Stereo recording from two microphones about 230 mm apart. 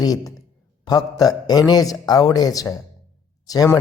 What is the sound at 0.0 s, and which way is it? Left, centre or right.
A man's voice, centre.